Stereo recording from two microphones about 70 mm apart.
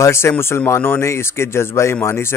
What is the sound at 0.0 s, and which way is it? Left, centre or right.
Speech, left.